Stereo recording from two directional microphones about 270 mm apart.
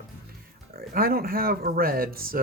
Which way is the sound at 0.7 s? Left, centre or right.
Right.